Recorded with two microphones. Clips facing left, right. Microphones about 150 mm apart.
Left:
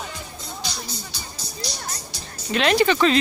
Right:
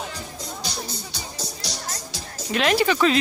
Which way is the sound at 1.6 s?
90° right.